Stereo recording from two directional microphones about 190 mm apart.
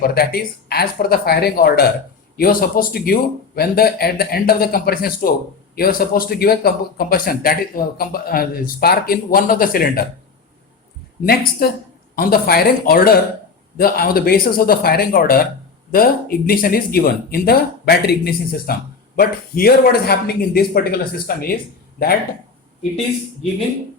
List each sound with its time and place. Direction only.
0.0 s speech: 55° left (ahead or behind)
11.2 s speech: 55° left (ahead or behind)